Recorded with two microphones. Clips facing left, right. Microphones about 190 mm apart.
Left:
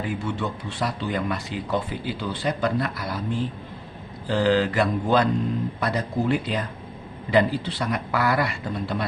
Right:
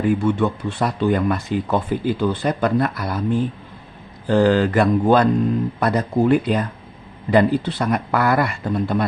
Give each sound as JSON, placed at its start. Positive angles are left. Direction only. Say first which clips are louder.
{"t": 0.0, "sound": "speech", "louder": "right 10 dB", "side_deg": -50}